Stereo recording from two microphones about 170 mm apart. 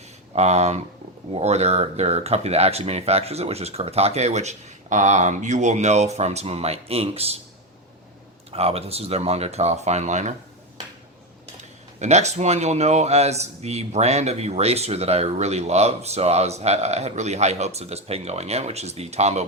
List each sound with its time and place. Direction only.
0.3 s speech: 40° right (ahead or behind)
8.4 s speech: 35° right (ahead or behind)
11.9 s speech: 40° right (ahead or behind)